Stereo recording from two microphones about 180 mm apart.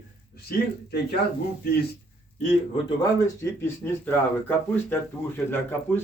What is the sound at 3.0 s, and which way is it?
Speech, 15° left (ahead or behind).